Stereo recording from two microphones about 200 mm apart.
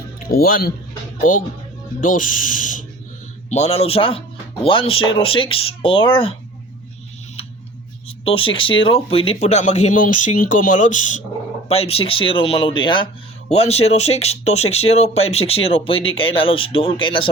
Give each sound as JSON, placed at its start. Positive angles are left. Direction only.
{"t": 0.3, "sound": "speech", "side_deg": 50}
{"t": 8.0, "sound": "speech", "side_deg": 30}